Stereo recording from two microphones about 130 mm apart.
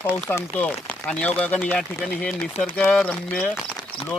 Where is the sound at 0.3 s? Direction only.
15° left (ahead or behind).